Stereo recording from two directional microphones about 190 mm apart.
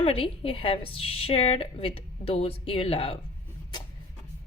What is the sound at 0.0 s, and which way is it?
A woman's voice, 30° left (ahead or behind).